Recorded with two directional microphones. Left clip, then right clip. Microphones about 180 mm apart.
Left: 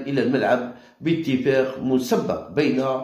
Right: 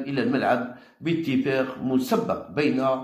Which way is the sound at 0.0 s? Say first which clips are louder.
Left 3 dB; 5° right (ahead or behind).